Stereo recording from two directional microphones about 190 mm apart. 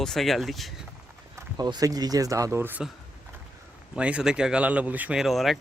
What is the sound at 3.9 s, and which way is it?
Speech, 5° right (ahead or behind).